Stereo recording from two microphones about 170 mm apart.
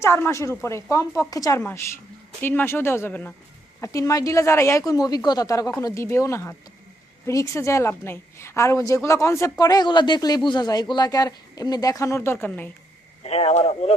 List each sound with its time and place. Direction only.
0.0 s a woman's voice: 15° left (ahead or behind)
13.2 s speech: 35° left (ahead or behind)